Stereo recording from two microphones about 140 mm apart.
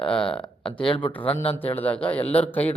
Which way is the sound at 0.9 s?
35° left (ahead or behind).